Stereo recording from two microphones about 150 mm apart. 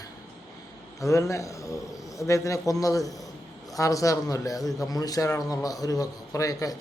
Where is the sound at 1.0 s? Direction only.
20° left (ahead or behind).